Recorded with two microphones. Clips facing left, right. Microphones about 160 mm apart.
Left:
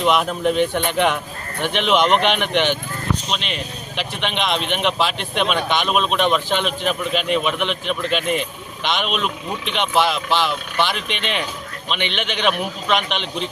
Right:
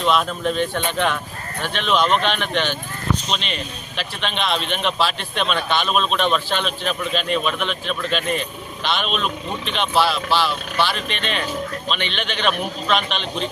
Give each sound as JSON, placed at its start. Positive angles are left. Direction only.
{"t": 0.0, "sound": "speech", "side_deg": 15}